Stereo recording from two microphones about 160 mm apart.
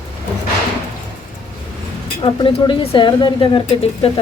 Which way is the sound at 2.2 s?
30° left (ahead or behind).